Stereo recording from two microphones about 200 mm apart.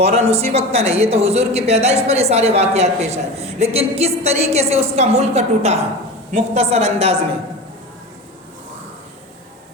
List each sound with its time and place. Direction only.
0.0 s speech: 30° right (ahead or behind)